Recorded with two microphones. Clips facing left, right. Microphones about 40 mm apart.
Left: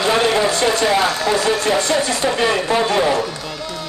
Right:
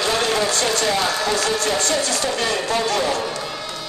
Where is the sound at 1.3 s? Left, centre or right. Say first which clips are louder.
Left 4 dB; centre.